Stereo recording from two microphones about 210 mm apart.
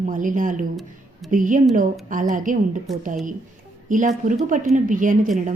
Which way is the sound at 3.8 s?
40° right (ahead or behind).